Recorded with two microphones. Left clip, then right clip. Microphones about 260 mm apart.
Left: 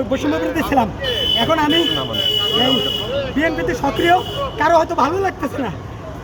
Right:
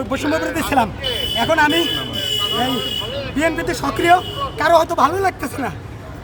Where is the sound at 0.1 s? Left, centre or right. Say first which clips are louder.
Right 3 dB; centre.